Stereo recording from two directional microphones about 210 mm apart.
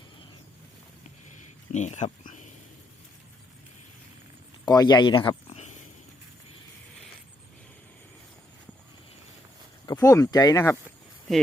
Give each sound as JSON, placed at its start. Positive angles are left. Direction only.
{"t": 1.7, "sound": "a sound", "side_deg": 35}
{"t": 4.6, "sound": "speech", "side_deg": 20}
{"t": 9.8, "sound": "speech", "side_deg": 15}